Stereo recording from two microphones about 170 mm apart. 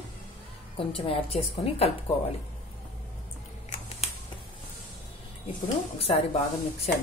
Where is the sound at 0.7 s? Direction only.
35° left (ahead or behind).